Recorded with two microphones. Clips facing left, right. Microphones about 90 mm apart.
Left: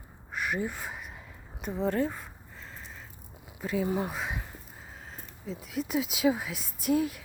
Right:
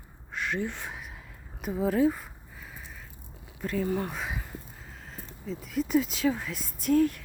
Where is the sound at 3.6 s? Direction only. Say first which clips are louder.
Even; 10° left (ahead or behind).